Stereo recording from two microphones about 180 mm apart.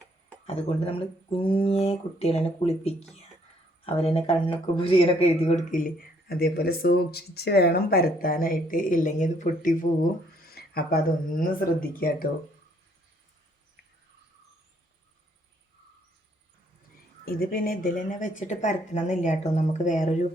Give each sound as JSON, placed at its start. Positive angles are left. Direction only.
{"t": 0.4, "sound": "speech", "side_deg": 35}
{"t": 10.4, "sound": "speech", "side_deg": 60}
{"t": 17.2, "sound": "speech", "side_deg": 55}